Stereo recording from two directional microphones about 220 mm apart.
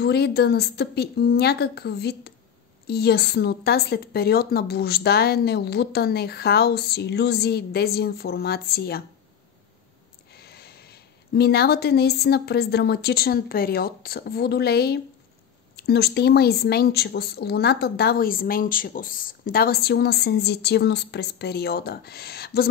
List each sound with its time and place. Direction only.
0.0 s speech: 45° left (ahead or behind)
10.3 s speech: 45° left (ahead or behind)